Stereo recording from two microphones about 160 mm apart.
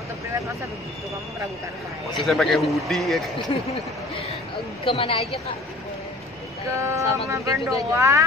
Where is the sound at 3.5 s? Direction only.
30° left (ahead or behind).